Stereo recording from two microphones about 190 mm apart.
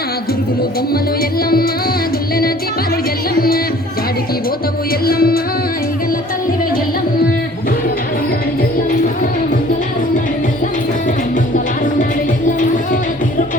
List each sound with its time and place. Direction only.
5.0 s music: 50° left (ahead or behind)